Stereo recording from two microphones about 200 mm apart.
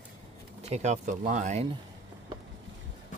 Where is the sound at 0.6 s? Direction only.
35° right (ahead or behind).